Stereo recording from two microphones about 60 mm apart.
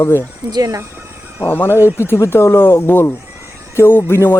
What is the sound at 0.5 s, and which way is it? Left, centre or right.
Speech, right.